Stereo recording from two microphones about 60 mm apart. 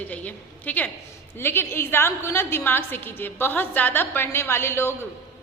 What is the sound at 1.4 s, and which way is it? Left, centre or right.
A woman's voice, left.